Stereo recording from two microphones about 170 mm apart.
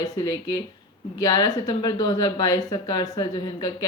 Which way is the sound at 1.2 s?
25° left (ahead or behind).